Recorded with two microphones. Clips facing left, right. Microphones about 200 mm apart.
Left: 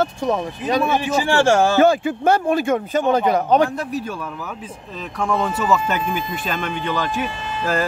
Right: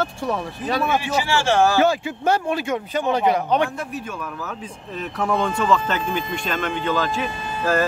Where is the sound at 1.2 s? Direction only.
55° left (ahead or behind); by 4.0 s 35° left (ahead or behind).